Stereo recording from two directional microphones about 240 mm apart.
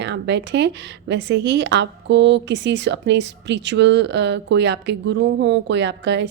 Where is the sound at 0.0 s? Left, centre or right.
Right.